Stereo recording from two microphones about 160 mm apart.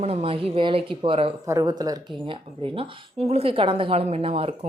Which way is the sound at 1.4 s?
20° right (ahead or behind).